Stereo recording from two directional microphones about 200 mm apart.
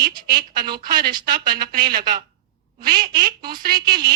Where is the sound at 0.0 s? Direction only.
50° right (ahead or behind).